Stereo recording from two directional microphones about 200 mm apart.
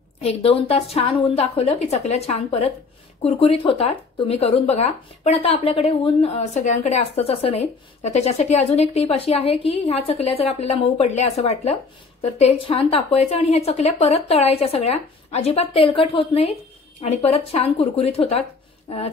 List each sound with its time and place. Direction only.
0.2 s speech: 30° left (ahead or behind)